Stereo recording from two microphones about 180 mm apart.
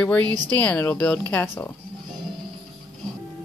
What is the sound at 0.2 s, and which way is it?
Speech, 20° right (ahead or behind).